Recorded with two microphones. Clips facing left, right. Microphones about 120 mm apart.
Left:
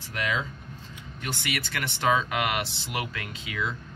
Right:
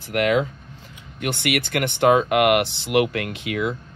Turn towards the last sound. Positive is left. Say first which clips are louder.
# right 8 dB
turn(degrees=-60)  # may be behind; listen again after turning